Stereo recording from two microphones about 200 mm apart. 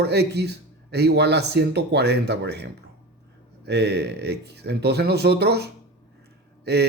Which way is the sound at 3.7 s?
55° right (ahead or behind).